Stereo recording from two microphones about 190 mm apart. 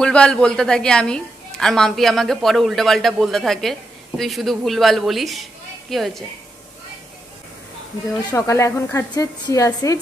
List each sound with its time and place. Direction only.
0.0 s a woman's voice: 5° left (ahead or behind)
8.3 s a woman's voice: 15° left (ahead or behind)